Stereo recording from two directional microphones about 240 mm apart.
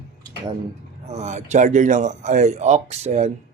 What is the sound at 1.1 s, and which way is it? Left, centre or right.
Speech, right.